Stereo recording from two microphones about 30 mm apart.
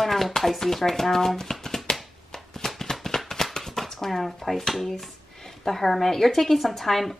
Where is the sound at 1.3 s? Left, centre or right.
Centre.